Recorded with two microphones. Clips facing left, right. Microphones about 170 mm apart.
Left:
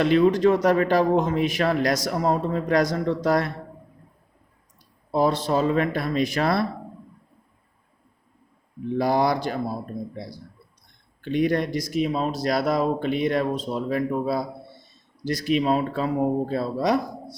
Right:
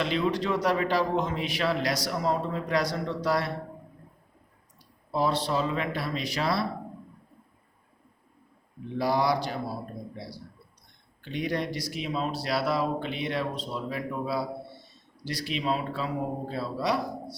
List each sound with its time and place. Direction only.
0.0 s a man's voice: 50° left (ahead or behind)
5.1 s a man's voice: 45° left (ahead or behind)
9.0 s a man's voice: 50° left (ahead or behind)
11.2 s a man's voice: 50° left (ahead or behind)